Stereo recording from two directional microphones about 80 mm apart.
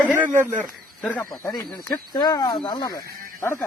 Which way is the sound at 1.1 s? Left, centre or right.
Left.